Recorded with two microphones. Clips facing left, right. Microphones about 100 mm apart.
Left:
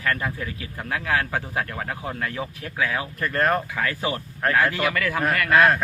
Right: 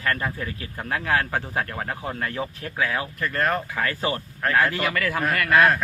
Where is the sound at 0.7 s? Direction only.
15° right (ahead or behind).